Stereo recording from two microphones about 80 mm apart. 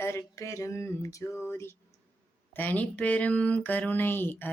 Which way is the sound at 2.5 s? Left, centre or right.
Left.